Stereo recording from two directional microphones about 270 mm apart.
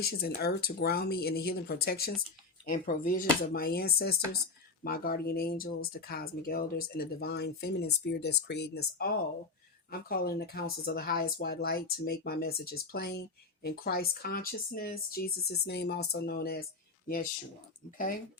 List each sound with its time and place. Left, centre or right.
0.0 s speech: left